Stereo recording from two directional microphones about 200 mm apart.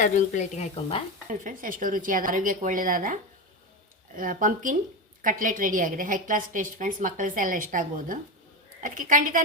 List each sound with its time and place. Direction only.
0.0 s speech: 35° left (ahead or behind)
1.3 s a woman's voice: 40° right (ahead or behind)